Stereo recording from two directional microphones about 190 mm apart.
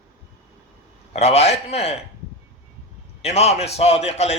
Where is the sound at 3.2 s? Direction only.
35° left (ahead or behind).